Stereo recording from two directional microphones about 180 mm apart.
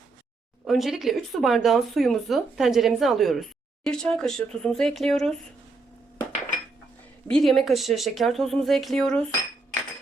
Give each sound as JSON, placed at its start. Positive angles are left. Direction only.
{"t": 0.7, "sound": "a woman's voice", "side_deg": 0}
{"t": 7.3, "sound": "a woman's voice", "side_deg": 5}